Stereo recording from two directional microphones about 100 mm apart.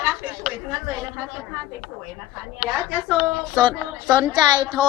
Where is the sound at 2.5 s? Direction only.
5° right (ahead or behind).